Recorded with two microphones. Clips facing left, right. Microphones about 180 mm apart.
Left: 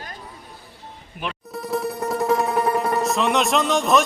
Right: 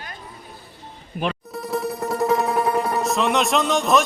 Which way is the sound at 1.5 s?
Centre (ahead or behind).